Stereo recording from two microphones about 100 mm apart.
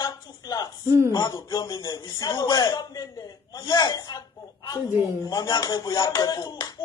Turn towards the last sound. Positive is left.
turn(degrees=45)  # may be behind; listen again after turning